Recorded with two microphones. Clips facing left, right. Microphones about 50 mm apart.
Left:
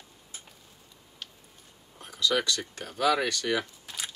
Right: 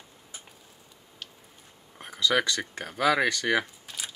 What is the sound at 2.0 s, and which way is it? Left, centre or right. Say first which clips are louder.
Speech: right 2 dB; right.